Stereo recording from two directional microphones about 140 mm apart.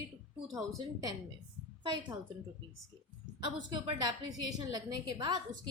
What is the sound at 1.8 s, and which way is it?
Speech, 35° right (ahead or behind).